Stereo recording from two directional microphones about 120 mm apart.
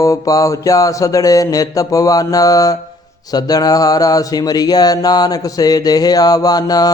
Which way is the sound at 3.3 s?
30° left (ahead or behind).